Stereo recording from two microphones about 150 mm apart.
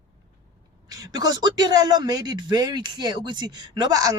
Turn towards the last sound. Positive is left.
turn(degrees=-25)  # may be behind; listen again after turning